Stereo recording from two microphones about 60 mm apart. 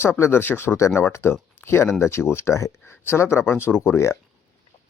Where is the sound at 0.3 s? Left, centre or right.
Left.